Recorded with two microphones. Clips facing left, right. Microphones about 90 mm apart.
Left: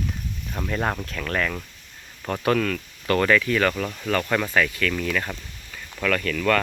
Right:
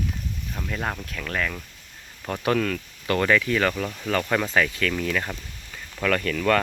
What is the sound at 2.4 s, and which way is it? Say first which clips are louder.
Speech: left 1 dB; 20° right (ahead or behind).